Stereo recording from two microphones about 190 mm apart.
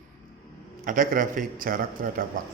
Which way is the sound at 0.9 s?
45° right (ahead or behind).